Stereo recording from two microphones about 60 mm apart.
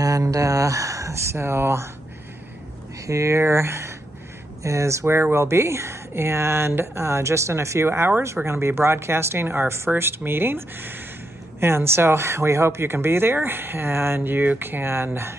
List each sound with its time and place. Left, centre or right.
0.0 s speech: right
3.1 s speech: right
4.6 s speech: right
5.0 s speech: right
7.1 s speech: right